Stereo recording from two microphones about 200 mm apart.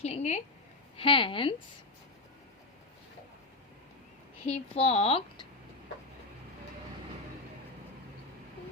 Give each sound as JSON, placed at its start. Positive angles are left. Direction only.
{"t": 0.0, "sound": "a sound", "side_deg": 30}
{"t": 0.9, "sound": "a woman's voice", "side_deg": 25}
{"t": 4.4, "sound": "speech", "side_deg": 30}